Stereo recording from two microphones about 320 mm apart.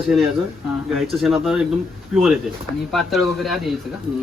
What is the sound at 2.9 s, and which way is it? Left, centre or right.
Speech, centre.